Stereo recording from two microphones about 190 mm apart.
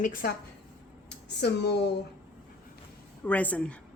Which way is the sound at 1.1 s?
60° left (ahead or behind).